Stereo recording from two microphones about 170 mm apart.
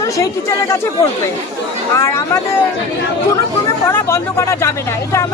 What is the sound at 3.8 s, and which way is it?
Speech, 15° left (ahead or behind).